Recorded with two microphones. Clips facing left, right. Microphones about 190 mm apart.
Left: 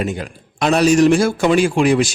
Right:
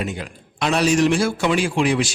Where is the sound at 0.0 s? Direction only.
45° left (ahead or behind).